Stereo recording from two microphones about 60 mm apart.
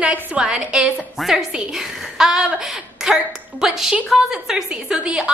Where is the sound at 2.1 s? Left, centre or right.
Centre.